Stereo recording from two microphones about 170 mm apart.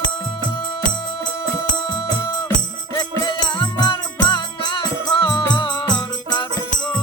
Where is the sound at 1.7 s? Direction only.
25° left (ahead or behind).